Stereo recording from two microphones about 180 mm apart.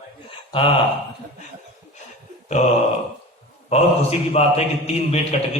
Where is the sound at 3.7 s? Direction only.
35° left (ahead or behind).